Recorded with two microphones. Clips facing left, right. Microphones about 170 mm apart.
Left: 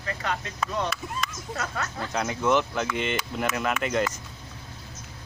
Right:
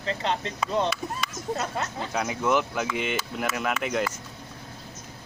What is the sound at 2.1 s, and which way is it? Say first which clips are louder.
Speech: left 1 dB; 10° right (ahead or behind).